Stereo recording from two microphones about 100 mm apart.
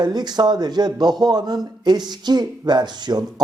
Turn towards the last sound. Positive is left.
turn(degrees=-45)  # may be behind; listen again after turning